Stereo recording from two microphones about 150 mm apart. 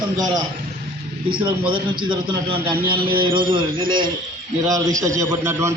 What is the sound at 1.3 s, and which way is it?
A man's voice, 35° right (ahead or behind).